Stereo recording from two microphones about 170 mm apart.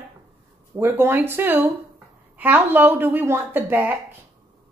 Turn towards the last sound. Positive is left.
turn(degrees=-10)  # may be behind; listen again after turning